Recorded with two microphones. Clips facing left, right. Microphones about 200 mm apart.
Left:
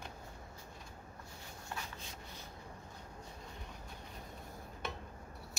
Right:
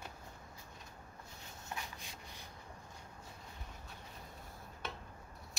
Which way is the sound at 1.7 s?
15° right (ahead or behind).